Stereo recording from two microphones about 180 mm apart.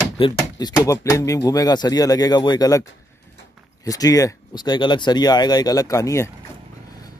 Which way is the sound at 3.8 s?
20° left (ahead or behind).